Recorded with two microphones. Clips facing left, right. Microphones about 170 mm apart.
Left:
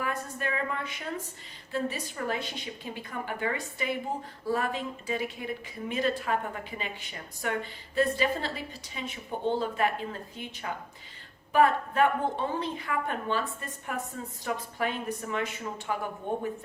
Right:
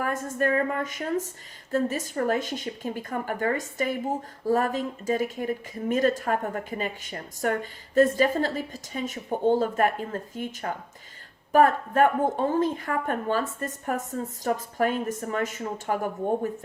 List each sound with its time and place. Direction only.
0.0 s a woman's voice: 45° right (ahead or behind)